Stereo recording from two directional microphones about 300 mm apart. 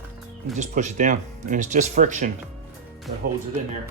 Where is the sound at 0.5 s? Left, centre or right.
Right.